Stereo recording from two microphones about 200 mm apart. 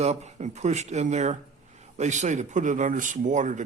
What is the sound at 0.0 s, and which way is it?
Speech, 35° right (ahead or behind).